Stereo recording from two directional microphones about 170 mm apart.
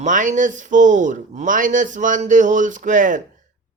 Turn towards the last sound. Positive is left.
turn(degrees=-50)  # may be behind; listen again after turning